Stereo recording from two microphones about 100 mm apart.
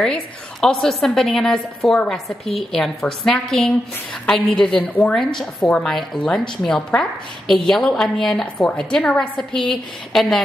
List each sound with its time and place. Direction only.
0.0 s a woman's voice: 5° left (ahead or behind)
4.7 s a woman's voice: 15° left (ahead or behind)
5.1 s a woman's voice: 5° left (ahead or behind)